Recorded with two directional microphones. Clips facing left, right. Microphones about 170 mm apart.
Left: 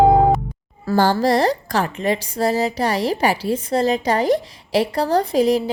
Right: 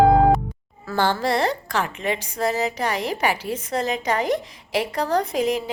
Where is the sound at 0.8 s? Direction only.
35° left (ahead or behind).